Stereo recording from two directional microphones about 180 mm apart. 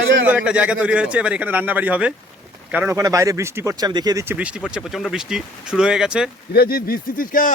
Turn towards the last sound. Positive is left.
turn(degrees=50)  # may be behind; listen again after turning